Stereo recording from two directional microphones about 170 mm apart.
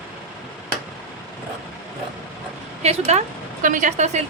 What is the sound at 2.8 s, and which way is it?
A woman's voice, 40° right (ahead or behind).